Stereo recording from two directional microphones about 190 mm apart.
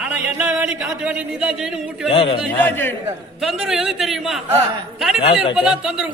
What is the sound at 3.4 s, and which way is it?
A man's voice, centre (ahead or behind).